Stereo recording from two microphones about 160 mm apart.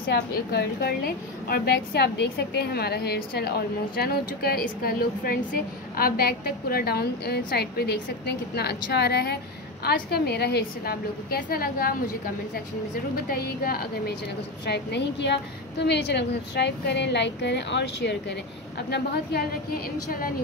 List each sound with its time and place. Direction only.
0.1 s a woman's voice: 80° left
13.1 s a woman's voice: 70° left (ahead or behind)
14.7 s a woman's voice: 90° left; by 20.3 s 65° left (ahead or behind)